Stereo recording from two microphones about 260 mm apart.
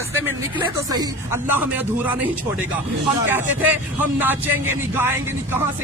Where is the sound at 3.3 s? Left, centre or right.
Centre.